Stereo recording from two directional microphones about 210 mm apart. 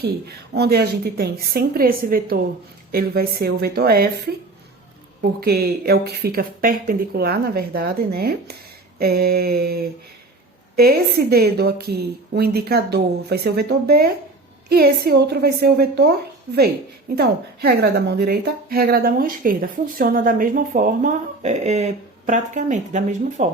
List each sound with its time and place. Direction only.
0.0 s a woman's voice: 50° right (ahead or behind)
5.4 s a woman's voice: 45° right (ahead or behind)
17.2 s a woman's voice: 50° right (ahead or behind)